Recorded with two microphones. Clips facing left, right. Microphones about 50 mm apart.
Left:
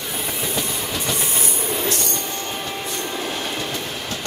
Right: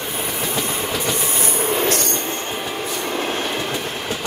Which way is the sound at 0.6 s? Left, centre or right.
Right.